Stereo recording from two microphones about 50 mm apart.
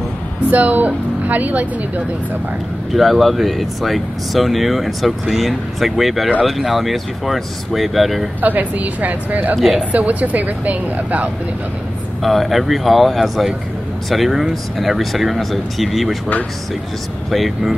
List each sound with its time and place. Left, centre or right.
0.5 s speech: right
2.9 s speech: centre
8.4 s speech: right
12.2 s speech: centre
17.3 s speech: centre